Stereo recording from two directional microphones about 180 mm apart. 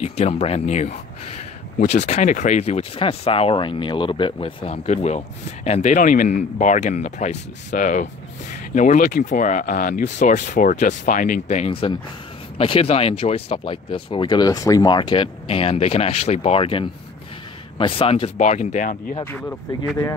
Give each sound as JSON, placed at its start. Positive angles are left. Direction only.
{"t": 0.0, "sound": "speech", "side_deg": 35}